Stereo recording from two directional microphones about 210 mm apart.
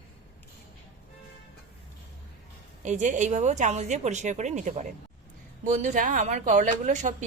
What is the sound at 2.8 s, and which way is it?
Speech, 35° right (ahead or behind).